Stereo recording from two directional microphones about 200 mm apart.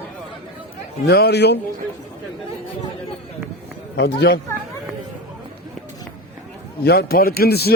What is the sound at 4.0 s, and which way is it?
Speech, 60° left (ahead or behind).